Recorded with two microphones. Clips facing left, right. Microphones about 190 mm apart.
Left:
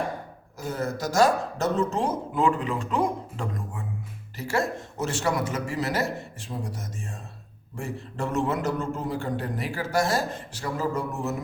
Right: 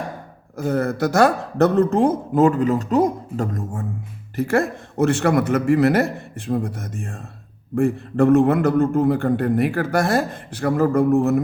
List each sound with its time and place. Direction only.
0.5 s speech: 60° right (ahead or behind)
4.4 s a man's voice: 55° right (ahead or behind)